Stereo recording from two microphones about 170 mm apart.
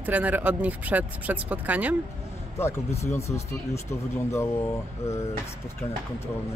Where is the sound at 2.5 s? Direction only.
15° left (ahead or behind).